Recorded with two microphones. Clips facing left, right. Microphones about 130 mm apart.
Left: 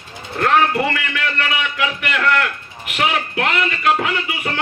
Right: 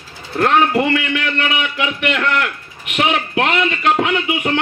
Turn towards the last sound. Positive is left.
turn(degrees=-25)  # may be behind; listen again after turning